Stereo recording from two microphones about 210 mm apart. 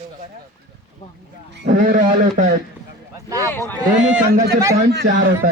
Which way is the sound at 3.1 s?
15° right (ahead or behind).